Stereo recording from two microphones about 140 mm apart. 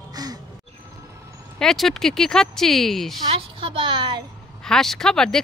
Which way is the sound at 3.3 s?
40° right (ahead or behind).